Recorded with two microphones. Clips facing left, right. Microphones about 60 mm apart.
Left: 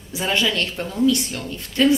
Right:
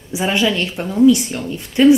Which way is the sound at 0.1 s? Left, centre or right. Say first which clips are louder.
Right 4 dB; centre.